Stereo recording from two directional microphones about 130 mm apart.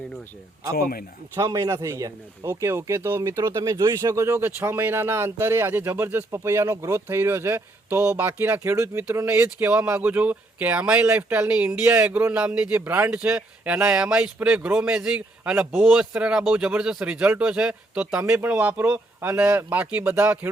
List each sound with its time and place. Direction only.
1.4 s speech: 25° right (ahead or behind)